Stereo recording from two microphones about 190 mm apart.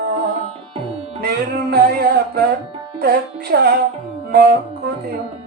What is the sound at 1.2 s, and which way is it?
Music, 55° right (ahead or behind).